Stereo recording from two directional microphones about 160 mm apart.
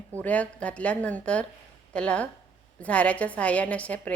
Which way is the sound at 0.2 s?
10° left (ahead or behind).